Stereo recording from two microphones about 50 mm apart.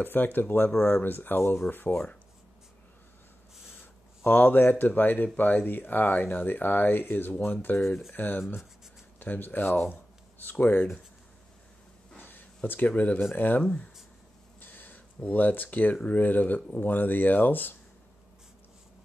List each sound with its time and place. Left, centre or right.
0.0 s speech: left
4.2 s speech: left
12.2 s a sound: left
12.6 s speech: left
14.6 s a sound: left
15.2 s speech: left